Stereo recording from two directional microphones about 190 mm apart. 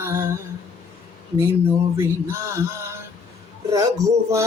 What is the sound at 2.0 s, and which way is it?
Music, 15° right (ahead or behind).